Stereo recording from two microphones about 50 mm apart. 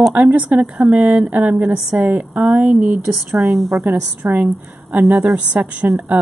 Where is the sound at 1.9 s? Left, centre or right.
Right.